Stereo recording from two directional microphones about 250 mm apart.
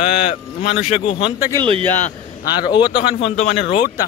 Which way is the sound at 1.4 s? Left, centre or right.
Centre.